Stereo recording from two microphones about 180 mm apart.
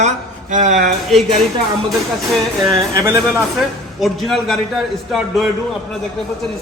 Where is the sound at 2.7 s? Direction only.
15° right (ahead or behind).